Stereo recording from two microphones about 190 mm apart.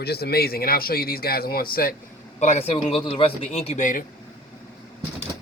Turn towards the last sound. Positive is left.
turn(degrees=40)  # may be behind; listen again after turning